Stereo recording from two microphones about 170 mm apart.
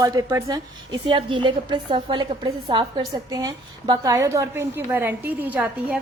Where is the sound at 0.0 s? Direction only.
20° right (ahead or behind).